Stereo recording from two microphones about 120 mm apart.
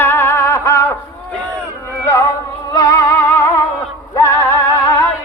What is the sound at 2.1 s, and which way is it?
Music, 25° left (ahead or behind).